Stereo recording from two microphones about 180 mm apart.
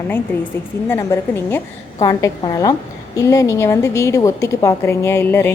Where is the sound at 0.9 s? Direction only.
15° left (ahead or behind).